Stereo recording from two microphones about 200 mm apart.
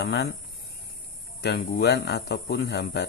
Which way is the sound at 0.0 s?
55° left (ahead or behind).